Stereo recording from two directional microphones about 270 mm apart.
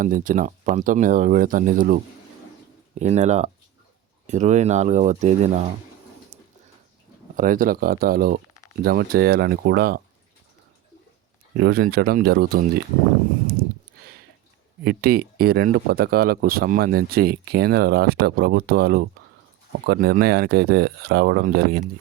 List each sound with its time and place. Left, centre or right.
0.0 s speech: right
6.3 s a sound: right
7.3 s speech: right
11.5 s speech: right
14.8 s speech: right